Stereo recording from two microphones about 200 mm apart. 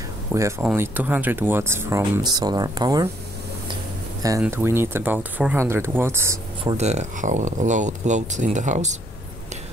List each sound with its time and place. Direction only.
0.3 s speech: 15° right (ahead or behind)
4.4 s speech: 10° right (ahead or behind)
6.6 s speech: 30° right (ahead or behind)